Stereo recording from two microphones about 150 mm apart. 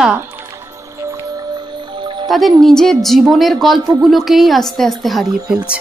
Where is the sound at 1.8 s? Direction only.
30° right (ahead or behind).